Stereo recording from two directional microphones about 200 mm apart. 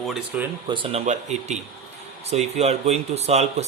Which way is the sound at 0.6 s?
25° right (ahead or behind).